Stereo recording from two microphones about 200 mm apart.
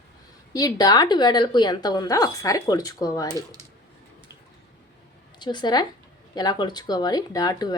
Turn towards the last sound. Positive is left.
turn(degrees=20)  # may be behind; listen again after turning